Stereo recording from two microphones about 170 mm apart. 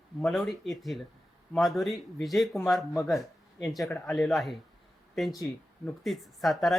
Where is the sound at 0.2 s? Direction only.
Centre (ahead or behind).